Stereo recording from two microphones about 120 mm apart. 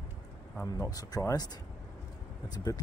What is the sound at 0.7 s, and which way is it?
Speech, 30° left (ahead or behind).